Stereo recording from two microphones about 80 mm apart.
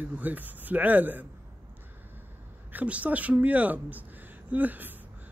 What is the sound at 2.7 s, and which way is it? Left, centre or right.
Speech, centre.